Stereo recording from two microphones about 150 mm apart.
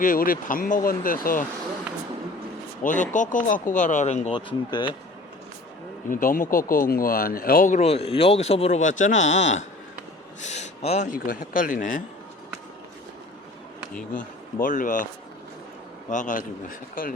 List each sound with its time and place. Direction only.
0.0 s speech: 70° left (ahead or behind)
2.8 s speech: 55° left (ahead or behind)
4.3 s speech: 30° left (ahead or behind)
6.1 s speech: 65° left (ahead or behind)
7.8 s speech: 40° left (ahead or behind)
11.1 s speech: 65° left (ahead or behind)
14.1 s speech: 60° left (ahead or behind)
16.0 s speech: 55° left (ahead or behind)